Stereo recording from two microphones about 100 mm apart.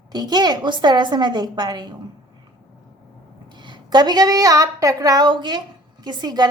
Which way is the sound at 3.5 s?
50° right (ahead or behind).